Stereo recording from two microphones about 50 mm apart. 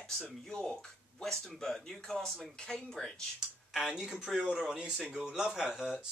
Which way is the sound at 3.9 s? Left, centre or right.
Centre.